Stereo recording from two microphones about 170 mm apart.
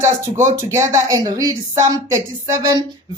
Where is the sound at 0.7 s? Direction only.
15° right (ahead or behind).